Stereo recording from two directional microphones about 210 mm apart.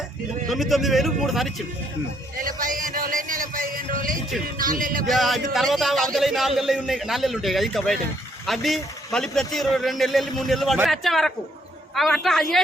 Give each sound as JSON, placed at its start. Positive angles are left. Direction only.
{"t": 0.4, "sound": "a man's voice", "side_deg": 0}
{"t": 2.4, "sound": "music", "side_deg": -40}
{"t": 4.5, "sound": "a man's voice", "side_deg": -40}
{"t": 5.0, "sound": "a man's voice", "side_deg": 0}